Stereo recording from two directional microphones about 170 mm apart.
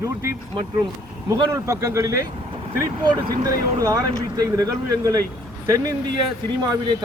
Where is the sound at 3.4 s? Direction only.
20° right (ahead or behind).